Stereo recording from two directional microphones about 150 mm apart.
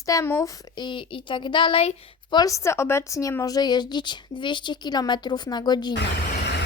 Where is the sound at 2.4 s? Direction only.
20° left (ahead or behind).